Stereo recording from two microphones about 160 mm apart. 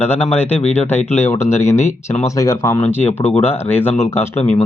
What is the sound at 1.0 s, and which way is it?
Speech, 45° left (ahead or behind).